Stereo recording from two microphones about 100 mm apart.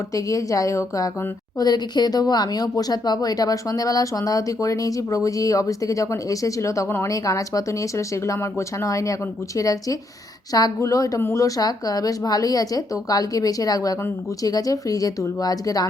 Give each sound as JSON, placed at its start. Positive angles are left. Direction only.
{"t": 0.1, "sound": "speech", "side_deg": 35}